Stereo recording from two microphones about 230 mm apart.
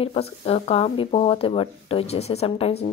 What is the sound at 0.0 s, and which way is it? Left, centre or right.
A woman's voice, left.